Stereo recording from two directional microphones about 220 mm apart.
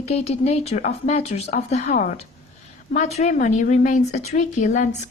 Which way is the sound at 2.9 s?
30° left (ahead or behind).